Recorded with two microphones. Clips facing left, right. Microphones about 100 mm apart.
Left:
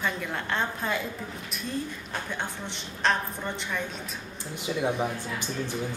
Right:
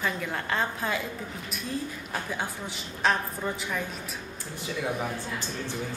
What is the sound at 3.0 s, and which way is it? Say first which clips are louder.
Speech: even; 5° right (ahead or behind).